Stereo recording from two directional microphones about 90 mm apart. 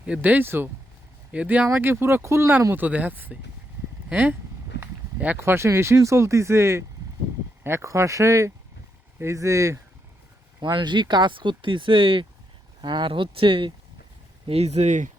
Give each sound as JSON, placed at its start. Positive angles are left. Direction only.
{"t": 0.0, "sound": "speech", "side_deg": -15}
{"t": 1.6, "sound": "speech", "side_deg": -25}
{"t": 10.6, "sound": "speech", "side_deg": -60}
{"t": 12.8, "sound": "speech", "side_deg": -60}
{"t": 14.5, "sound": "speech", "side_deg": -90}